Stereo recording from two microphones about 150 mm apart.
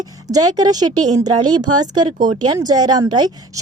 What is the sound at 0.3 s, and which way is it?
A woman's voice, 25° right (ahead or behind).